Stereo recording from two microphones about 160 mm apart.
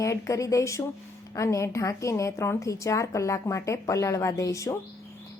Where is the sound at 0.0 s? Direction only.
20° left (ahead or behind).